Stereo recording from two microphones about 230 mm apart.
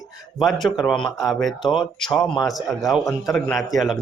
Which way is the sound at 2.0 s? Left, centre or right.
Centre.